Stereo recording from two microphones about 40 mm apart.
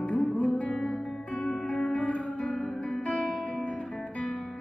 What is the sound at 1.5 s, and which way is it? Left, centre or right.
Music, centre.